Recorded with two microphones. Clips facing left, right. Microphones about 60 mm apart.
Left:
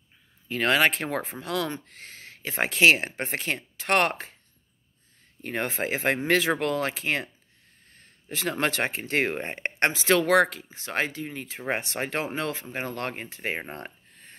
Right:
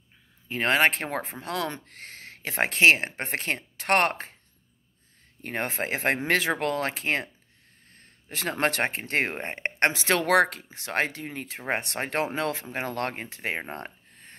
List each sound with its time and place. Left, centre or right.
0.5 s speech: right
1.7 s speech: right
5.4 s speech: right
8.3 s speech: right
12.7 s speech: right